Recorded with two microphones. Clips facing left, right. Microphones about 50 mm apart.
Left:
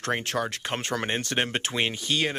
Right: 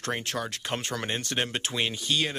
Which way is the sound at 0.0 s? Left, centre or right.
Left.